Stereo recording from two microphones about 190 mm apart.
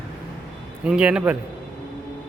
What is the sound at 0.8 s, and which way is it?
Speech, 5° right (ahead or behind).